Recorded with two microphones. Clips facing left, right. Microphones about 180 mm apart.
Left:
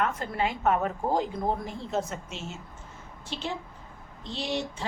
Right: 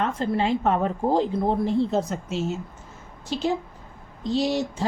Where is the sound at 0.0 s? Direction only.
30° right (ahead or behind).